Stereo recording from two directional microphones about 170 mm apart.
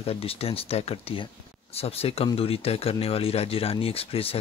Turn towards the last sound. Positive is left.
turn(degrees=35)  # may be behind; listen again after turning